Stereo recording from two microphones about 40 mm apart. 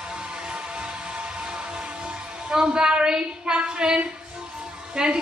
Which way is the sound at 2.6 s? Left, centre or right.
Right.